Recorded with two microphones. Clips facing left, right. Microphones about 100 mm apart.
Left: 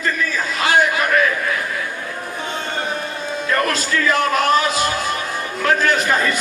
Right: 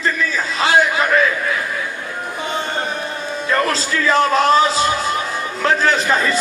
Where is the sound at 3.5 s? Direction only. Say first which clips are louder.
Right 1 dB; 25° right (ahead or behind).